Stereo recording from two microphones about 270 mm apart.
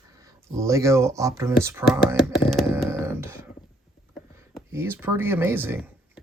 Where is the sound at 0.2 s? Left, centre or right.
Centre.